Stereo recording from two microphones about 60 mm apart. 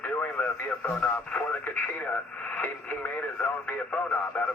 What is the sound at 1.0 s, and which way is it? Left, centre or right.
Speech, left.